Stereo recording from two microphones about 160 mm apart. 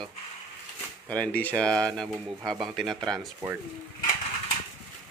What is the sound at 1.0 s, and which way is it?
Mantra, 10° left (ahead or behind).